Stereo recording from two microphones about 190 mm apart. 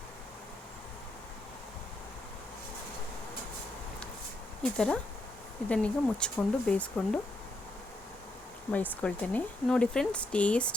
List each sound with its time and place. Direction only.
4.6 s speech: 5° left (ahead or behind)
8.7 s speech: 10° left (ahead or behind)